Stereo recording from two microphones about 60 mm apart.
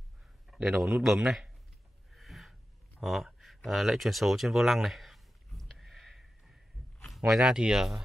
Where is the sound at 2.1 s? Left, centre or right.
Centre.